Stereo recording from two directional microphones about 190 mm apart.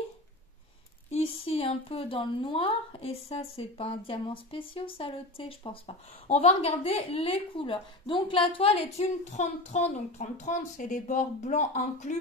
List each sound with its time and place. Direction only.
1.1 s speech: 30° left (ahead or behind)